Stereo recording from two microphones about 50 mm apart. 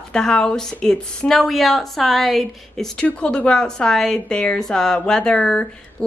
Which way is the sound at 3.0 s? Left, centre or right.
Centre.